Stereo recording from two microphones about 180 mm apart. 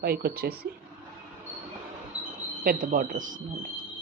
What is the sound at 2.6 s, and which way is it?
Speech, 50° right (ahead or behind).